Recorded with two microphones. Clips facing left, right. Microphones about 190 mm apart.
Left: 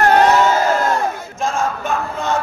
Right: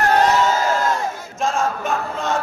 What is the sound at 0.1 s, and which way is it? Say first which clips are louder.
Crowd: left 3 dB; 60° left (ahead or behind).